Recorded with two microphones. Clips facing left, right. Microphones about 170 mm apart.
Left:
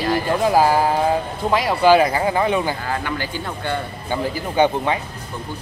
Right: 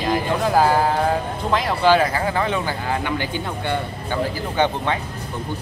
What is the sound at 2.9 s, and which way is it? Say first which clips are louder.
Speech: right 1 dB; 20° right (ahead or behind).